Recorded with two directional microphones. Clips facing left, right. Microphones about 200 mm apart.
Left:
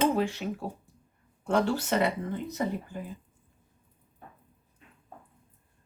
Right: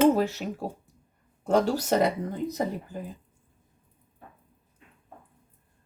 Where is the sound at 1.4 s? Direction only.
40° right (ahead or behind).